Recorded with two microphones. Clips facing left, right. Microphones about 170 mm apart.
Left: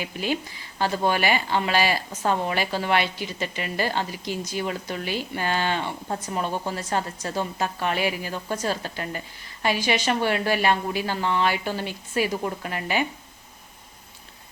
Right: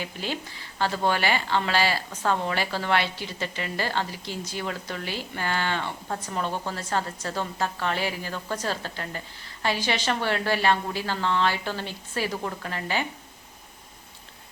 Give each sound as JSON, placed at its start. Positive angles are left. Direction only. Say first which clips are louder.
{"t": 0.0, "sound": "a woman's voice", "louder": "left 4 dB", "side_deg": 15}